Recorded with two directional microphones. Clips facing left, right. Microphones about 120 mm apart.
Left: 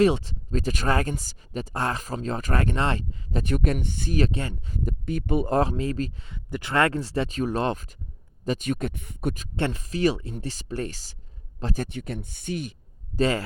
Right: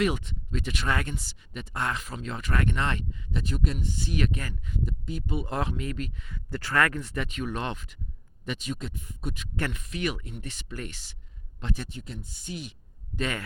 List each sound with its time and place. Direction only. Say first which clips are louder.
0.0 s speech: left 7 dB; 35° left (ahead or behind)
3.4 s speech: left 6 dB; 60° left (ahead or behind)
4.1 s speech: left 5 dB; 30° left (ahead or behind)
4.9 s speech: left 7 dB; 55° left (ahead or behind)
5.5 s speech: left 7 dB; 40° left (ahead or behind)
8.4 s speech: left 7 dB; 50° left (ahead or behind)
9.6 s speech: left 6 dB; 30° left (ahead or behind)
11.9 s speech: left 7 dB; 65° left (ahead or behind)
13.1 s speech: left 8 dB; 30° left (ahead or behind)